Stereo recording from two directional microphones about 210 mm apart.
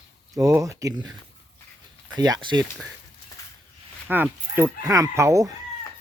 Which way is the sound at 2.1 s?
20° right (ahead or behind).